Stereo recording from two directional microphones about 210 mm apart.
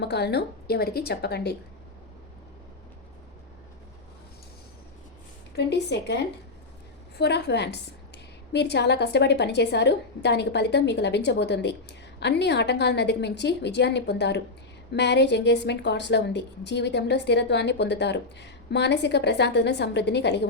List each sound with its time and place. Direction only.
0.0 s a woman's voice: 55° left (ahead or behind)
5.5 s a woman's voice: 55° left (ahead or behind)